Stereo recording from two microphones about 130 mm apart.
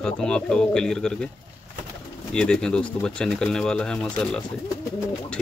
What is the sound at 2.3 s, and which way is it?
Speech, 5° left (ahead or behind).